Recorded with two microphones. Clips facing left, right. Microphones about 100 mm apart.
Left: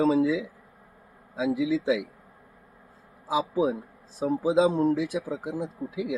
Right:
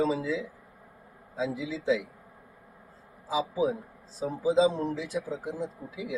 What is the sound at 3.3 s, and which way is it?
Speech, 65° left (ahead or behind).